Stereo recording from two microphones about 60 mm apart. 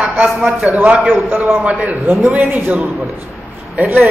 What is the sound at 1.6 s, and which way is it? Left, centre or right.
A man's voice, right.